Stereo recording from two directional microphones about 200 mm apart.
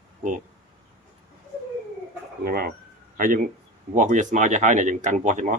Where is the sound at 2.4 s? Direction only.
50° right (ahead or behind).